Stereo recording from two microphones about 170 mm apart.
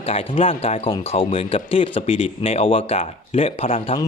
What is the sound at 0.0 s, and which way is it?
Speech, 35° left (ahead or behind).